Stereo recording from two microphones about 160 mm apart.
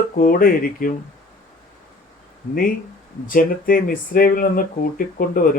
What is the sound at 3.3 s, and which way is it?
Speech, 60° left (ahead or behind).